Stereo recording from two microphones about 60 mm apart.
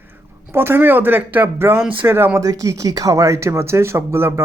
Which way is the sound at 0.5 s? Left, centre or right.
Right.